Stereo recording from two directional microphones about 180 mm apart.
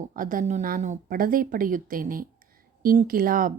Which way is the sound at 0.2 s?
45° right (ahead or behind).